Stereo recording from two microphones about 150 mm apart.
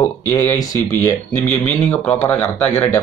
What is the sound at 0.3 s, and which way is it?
Speech, 20° left (ahead or behind).